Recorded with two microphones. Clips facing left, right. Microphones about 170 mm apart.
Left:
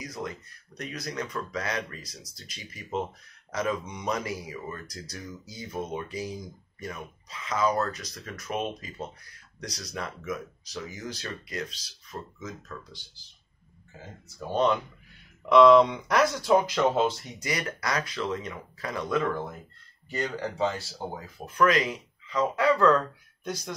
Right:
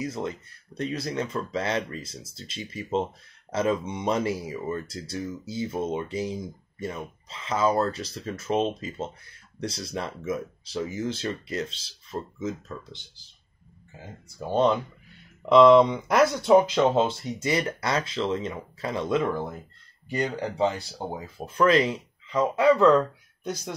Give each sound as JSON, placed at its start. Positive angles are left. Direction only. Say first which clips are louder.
{"t": 0.0, "sound": "speech", "louder": "right 5 dB", "side_deg": -25}
{"t": 15.4, "sound": "speech", "louder": "right 2 dB", "side_deg": -25}
{"t": 20.1, "sound": "speech", "louder": "right 3 dB", "side_deg": -15}